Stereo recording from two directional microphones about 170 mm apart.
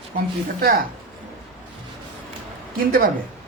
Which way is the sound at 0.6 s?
60° right (ahead or behind).